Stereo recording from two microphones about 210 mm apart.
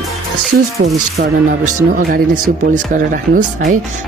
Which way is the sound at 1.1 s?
40° right (ahead or behind).